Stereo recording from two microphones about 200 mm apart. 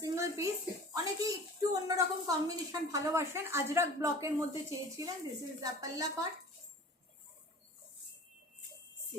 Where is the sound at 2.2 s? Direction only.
15° right (ahead or behind).